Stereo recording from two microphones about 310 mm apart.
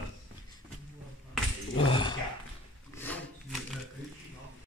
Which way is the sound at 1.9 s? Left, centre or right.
Centre.